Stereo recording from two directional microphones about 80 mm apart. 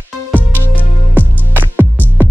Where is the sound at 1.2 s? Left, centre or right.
Right.